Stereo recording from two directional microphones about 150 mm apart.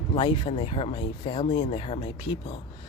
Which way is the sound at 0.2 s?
40° left (ahead or behind).